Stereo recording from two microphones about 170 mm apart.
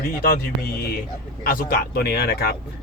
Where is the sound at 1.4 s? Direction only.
60° left (ahead or behind).